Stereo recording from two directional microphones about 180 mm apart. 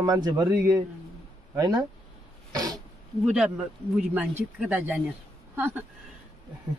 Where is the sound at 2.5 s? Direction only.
20° right (ahead or behind).